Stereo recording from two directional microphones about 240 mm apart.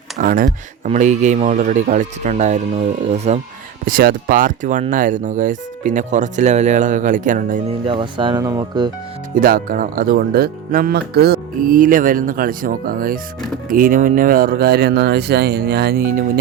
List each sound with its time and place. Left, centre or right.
0.2 s speech: right
7.9 s speech: centre
9.3 s speech: right